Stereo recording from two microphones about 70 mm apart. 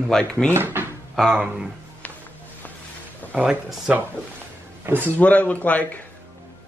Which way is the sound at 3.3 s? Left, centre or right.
Centre.